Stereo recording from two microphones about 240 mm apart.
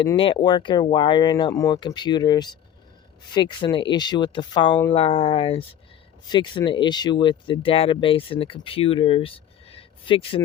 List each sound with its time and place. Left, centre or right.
0.0 s speech: left